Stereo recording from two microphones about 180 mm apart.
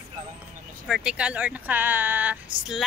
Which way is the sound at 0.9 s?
5° right (ahead or behind).